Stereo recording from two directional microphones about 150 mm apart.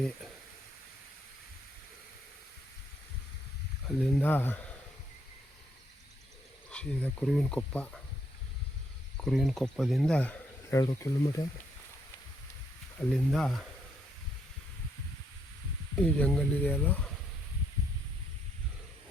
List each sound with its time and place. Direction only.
3.8 s speech: 5° left (ahead or behind)
6.7 s speech: 5° left (ahead or behind)
9.1 s speech: 5° left (ahead or behind)
10.8 s speech: 25° left (ahead or behind)
13.0 s speech: 5° left (ahead or behind)
16.0 s speech: 10° left (ahead or behind)